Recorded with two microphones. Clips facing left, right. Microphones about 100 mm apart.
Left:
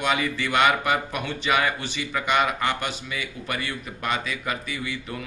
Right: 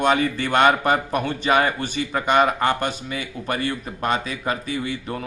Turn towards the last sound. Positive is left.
turn(degrees=-35)  # may be behind; listen again after turning